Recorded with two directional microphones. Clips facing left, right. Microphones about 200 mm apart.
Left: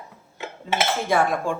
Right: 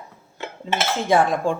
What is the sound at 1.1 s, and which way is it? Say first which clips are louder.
Speech: right 5 dB; 20° right (ahead or behind).